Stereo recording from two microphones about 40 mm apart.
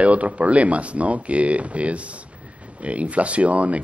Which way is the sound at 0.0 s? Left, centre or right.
Right.